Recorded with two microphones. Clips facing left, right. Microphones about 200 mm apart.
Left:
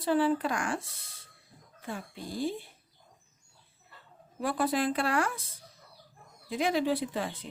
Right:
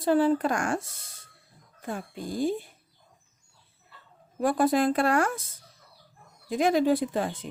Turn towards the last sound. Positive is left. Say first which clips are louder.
# right 5 dB
turn(degrees=-45)  # may be behind; listen again after turning